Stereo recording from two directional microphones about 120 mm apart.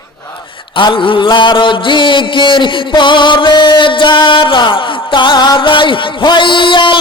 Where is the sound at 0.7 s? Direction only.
45° left (ahead or behind).